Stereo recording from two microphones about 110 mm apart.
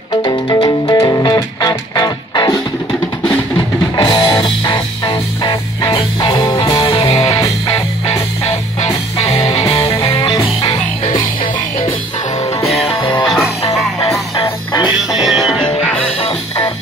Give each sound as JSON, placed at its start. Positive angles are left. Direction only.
{"t": 0.2, "sound": "music", "side_deg": 40}
{"t": 3.9, "sound": "music", "side_deg": 40}
{"t": 7.2, "sound": "music", "side_deg": 30}
{"t": 9.2, "sound": "music", "side_deg": 35}
{"t": 9.6, "sound": "music", "side_deg": 60}
{"t": 10.0, "sound": "music", "side_deg": 45}
{"t": 12.6, "sound": "music", "side_deg": 0}
{"t": 13.6, "sound": "music", "side_deg": 35}
{"t": 15.0, "sound": "music", "side_deg": 0}